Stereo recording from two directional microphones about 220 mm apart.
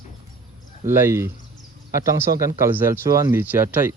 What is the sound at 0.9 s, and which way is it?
Speech, 10° right (ahead or behind).